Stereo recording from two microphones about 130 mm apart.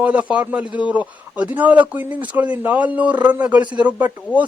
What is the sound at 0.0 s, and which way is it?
A man's voice, 10° right (ahead or behind).